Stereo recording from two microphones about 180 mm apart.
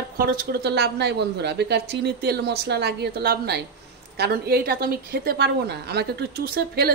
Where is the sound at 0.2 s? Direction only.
60° right (ahead or behind).